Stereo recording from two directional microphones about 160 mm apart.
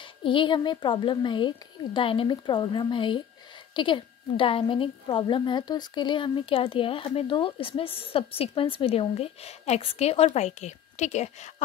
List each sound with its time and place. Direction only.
0.0 s a woman's voice: 30° left (ahead or behind)